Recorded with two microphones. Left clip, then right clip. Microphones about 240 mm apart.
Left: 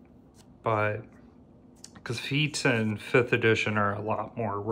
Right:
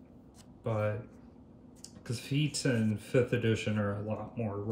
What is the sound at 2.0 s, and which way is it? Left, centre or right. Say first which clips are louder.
Speech: left 7 dB; centre.